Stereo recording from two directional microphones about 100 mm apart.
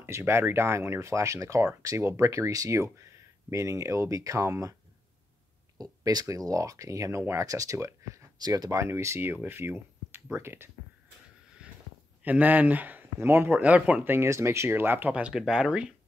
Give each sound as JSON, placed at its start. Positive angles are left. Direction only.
{"t": 0.0, "sound": "speech", "side_deg": -25}
{"t": 5.8, "sound": "speech", "side_deg": -40}
{"t": 8.7, "sound": "speech", "side_deg": -30}
{"t": 11.6, "sound": "a sound", "side_deg": -10}
{"t": 12.2, "sound": "speech", "side_deg": -15}